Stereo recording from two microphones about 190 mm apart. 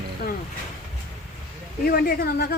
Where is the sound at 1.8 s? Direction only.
55° left (ahead or behind).